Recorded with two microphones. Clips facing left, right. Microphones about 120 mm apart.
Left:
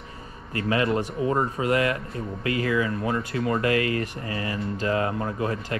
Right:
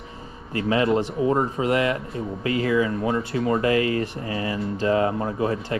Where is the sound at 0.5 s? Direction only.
25° right (ahead or behind).